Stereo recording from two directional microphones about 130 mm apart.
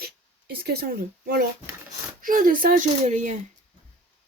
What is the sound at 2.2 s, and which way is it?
Speech, 90° right.